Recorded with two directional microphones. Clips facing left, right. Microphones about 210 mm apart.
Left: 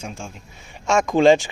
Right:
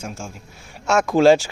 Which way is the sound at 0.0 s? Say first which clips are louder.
Right 1 dB; centre (ahead or behind).